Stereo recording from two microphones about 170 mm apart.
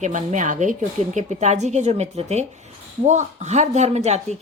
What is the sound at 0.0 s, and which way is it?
A woman's voice, 45° right (ahead or behind).